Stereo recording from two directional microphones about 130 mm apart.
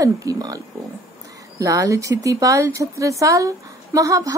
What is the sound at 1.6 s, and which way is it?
A woman's voice, 25° right (ahead or behind).